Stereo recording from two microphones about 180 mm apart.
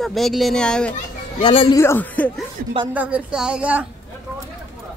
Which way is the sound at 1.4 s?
30° left (ahead or behind).